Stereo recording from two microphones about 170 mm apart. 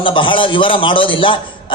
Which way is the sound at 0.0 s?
30° left (ahead or behind).